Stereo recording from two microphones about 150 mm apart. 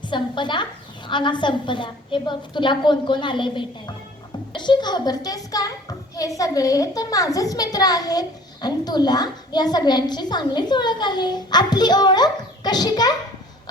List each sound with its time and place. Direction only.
0.0 s a woman's voice: 30° left (ahead or behind)